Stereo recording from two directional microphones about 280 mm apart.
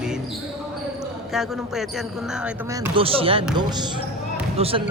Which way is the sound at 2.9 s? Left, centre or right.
Centre.